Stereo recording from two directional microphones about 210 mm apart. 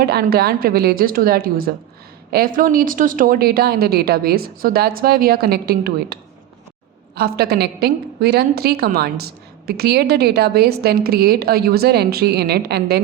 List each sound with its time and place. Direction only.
0.0 s a woman's voice: 50° right (ahead or behind)
7.2 s a woman's voice: 50° right (ahead or behind)